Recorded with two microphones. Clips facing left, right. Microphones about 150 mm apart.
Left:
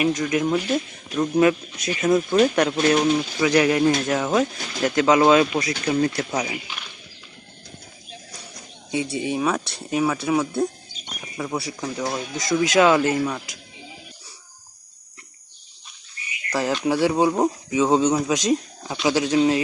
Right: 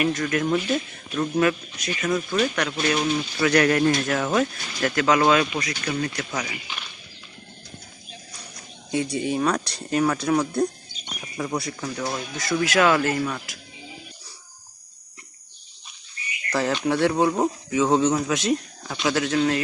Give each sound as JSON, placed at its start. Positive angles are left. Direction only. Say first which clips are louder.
{"t": 0.0, "sound": "speech", "louder": "left 2 dB", "side_deg": 10}
{"t": 2.9, "sound": "speech", "louder": "left 4 dB", "side_deg": 15}
{"t": 8.9, "sound": "speech", "louder": "even", "side_deg": 5}
{"t": 16.5, "sound": "speech", "louder": "left 1 dB", "side_deg": 5}